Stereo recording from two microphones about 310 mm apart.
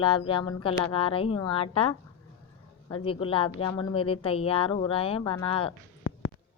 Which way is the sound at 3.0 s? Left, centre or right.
Centre.